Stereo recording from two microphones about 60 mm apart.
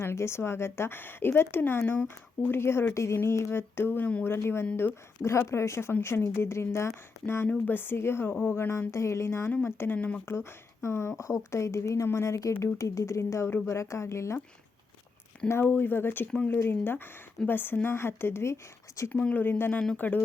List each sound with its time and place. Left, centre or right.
0.0 s a woman's voice: left
9.9 s speech: left
10.8 s speech: left
15.4 s a woman's voice: left
19.2 s a woman's voice: left